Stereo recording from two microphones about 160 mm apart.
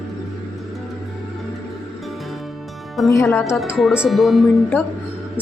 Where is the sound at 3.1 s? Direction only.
20° left (ahead or behind).